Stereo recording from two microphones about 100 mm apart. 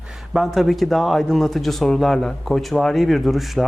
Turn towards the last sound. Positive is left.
turn(degrees=0)  # may be behind; listen again after turning